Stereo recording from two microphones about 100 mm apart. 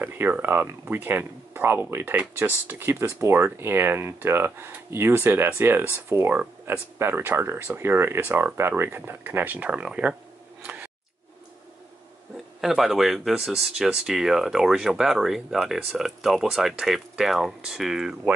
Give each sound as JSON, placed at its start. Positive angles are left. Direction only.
{"t": 0.0, "sound": "speech", "side_deg": -20}
{"t": 10.6, "sound": "scissors", "side_deg": -15}
{"t": 12.5, "sound": "speech", "side_deg": -5}